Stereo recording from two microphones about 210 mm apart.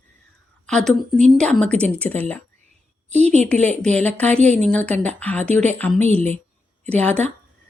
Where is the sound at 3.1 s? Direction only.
30° right (ahead or behind).